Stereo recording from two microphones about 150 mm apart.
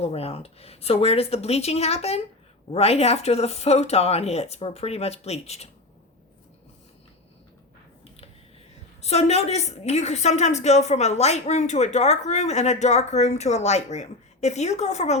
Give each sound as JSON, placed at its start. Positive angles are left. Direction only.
{"t": 0.0, "sound": "a woman's voice", "side_deg": 45}
{"t": 9.0, "sound": "a woman's voice", "side_deg": 45}